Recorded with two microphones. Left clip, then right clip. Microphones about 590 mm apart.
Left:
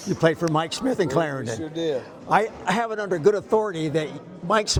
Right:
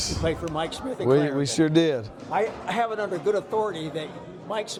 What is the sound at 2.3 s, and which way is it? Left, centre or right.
A man's voice, left.